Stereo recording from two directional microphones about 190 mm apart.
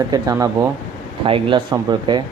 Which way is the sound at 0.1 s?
20° right (ahead or behind).